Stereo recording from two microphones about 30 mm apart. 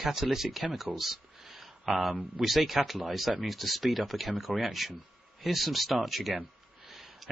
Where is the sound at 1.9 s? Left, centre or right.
Right.